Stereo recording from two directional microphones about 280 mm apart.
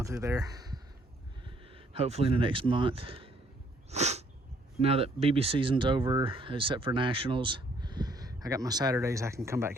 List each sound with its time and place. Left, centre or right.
0.0 s speech: centre
3.9 s sneeze: right
4.8 s speech: right